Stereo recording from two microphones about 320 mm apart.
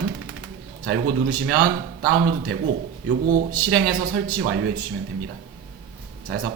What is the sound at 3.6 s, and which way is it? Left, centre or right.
Speech, right.